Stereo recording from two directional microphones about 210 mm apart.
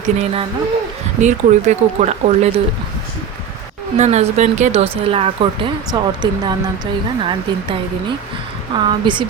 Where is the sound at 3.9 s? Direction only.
30° right (ahead or behind).